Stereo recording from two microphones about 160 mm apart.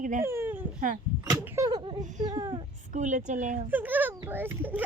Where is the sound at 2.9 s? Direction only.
50° right (ahead or behind).